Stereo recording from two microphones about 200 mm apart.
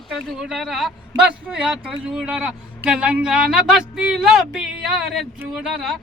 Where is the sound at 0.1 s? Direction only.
Centre (ahead or behind).